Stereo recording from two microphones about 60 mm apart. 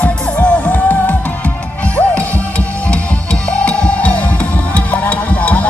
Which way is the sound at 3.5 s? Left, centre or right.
Centre.